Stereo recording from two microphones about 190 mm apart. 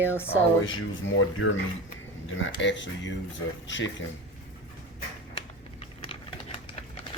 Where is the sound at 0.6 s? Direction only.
90° left; by 3.9 s 75° left (ahead or behind).